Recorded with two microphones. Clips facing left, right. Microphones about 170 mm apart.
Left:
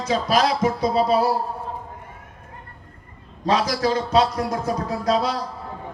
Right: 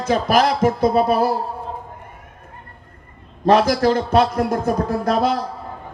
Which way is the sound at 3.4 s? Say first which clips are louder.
Right 6 dB; 55° right (ahead or behind).